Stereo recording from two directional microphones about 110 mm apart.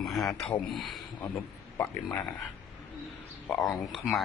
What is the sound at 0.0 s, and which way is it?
Speech, centre (ahead or behind).